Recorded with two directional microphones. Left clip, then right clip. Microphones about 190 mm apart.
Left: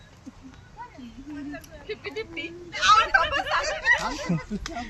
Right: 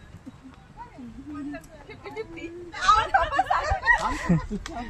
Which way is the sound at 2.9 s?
30° right (ahead or behind).